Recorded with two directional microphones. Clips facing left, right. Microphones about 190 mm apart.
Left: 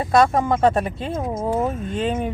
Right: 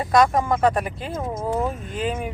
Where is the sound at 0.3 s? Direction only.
25° left (ahead or behind).